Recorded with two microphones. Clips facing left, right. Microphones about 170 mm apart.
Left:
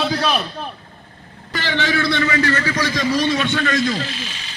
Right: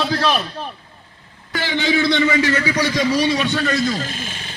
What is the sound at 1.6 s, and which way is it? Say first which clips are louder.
A man's voice: right 2 dB; 15° right (ahead or behind).